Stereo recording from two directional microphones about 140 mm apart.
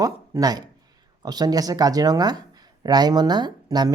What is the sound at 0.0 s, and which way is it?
Speech, 25° right (ahead or behind).